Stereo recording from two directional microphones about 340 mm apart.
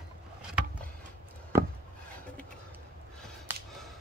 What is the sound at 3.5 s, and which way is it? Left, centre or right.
Whip, centre.